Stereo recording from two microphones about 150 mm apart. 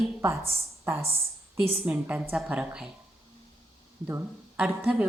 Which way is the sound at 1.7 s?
10° right (ahead or behind).